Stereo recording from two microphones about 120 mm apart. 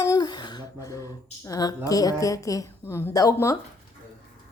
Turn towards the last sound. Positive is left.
turn(degrees=25)  # may be behind; listen again after turning